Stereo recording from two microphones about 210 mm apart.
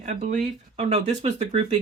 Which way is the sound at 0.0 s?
35° right (ahead or behind).